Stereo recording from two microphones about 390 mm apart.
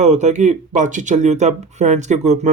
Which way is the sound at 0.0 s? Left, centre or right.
Centre.